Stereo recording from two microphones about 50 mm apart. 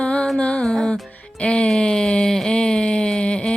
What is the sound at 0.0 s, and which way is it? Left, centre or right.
Music, left.